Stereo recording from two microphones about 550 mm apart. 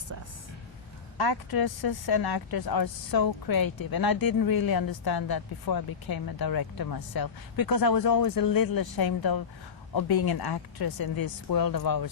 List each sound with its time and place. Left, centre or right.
1.2 s a woman's voice: left